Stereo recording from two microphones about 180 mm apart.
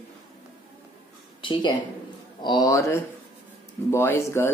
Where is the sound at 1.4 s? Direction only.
25° left (ahead or behind).